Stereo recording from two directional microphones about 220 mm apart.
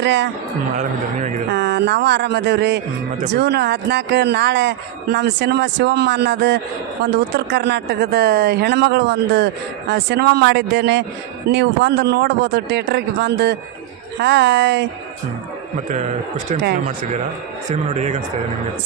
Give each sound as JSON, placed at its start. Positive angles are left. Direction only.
{"t": 0.0, "sound": "speech", "side_deg": -55}
{"t": 0.8, "sound": "a man's voice", "side_deg": -30}
{"t": 1.5, "sound": "speech", "side_deg": -50}
{"t": 17.7, "sound": "a man's voice", "side_deg": -30}